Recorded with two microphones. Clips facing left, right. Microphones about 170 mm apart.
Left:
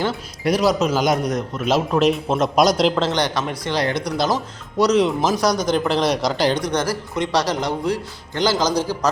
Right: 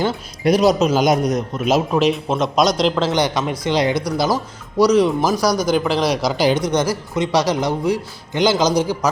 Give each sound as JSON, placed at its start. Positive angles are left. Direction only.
{"t": 0.0, "sound": "speech", "side_deg": -20}
{"t": 2.0, "sound": "a man's voice", "side_deg": 0}
{"t": 3.1, "sound": "speech", "side_deg": -10}
{"t": 4.8, "sound": "a man's voice", "side_deg": 0}